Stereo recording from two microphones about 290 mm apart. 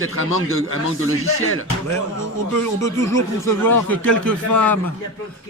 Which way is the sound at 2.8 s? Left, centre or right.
Centre.